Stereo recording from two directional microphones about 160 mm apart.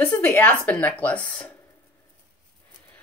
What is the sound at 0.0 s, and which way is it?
Speech, 10° left (ahead or behind).